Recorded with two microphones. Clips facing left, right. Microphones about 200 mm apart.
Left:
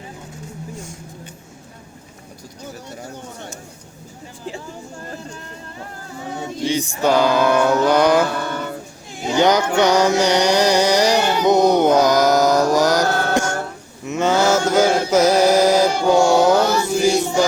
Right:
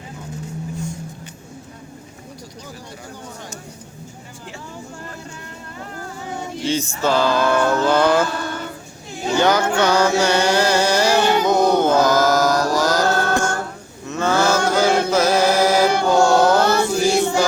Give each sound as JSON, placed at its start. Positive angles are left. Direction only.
{"t": 6.7, "sound": "a sound", "side_deg": 15}
{"t": 8.3, "sound": "a sound", "side_deg": 55}
{"t": 9.3, "sound": "carnatic music", "side_deg": 20}
{"t": 11.4, "sound": "mantra", "side_deg": 20}
{"t": 16.0, "sound": "carnatic music", "side_deg": 15}
{"t": 16.6, "sound": "chant", "side_deg": -60}